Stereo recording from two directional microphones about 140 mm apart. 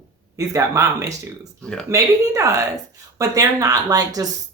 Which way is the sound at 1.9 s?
20° right (ahead or behind).